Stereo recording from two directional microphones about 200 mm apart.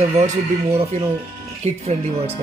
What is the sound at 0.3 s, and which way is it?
Speech, 35° right (ahead or behind).